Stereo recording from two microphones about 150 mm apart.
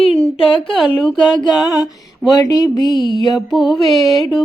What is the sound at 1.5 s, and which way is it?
Speech, 25° left (ahead or behind).